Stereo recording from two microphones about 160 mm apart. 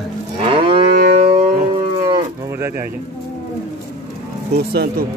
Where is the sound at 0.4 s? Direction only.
35° right (ahead or behind).